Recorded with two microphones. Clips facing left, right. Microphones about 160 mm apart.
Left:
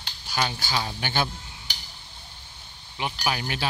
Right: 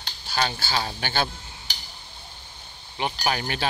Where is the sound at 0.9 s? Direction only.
15° left (ahead or behind).